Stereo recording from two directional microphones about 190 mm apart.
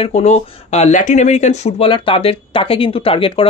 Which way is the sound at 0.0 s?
35° left (ahead or behind).